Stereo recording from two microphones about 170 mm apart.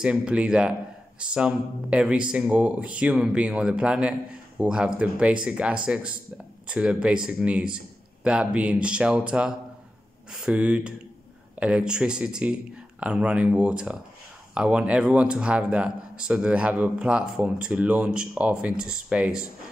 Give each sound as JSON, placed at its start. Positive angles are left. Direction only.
{"t": 0.0, "sound": "a man's voice", "side_deg": -5}